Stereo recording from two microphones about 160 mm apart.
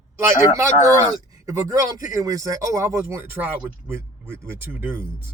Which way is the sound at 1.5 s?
20° right (ahead or behind).